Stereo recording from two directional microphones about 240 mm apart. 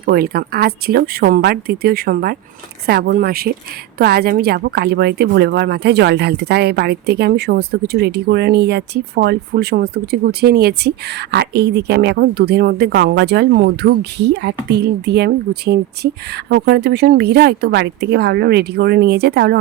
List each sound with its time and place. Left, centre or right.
0.0 s a woman's voice: right